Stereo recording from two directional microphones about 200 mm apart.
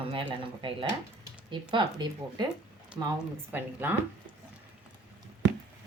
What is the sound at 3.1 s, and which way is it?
Speech, 10° right (ahead or behind).